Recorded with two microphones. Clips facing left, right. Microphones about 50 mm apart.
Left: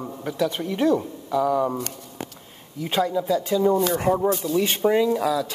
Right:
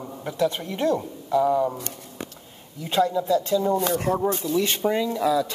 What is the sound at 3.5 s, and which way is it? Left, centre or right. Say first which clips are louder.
Speech: left 2 dB; centre.